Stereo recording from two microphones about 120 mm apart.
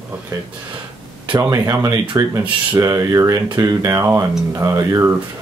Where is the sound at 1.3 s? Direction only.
20° right (ahead or behind).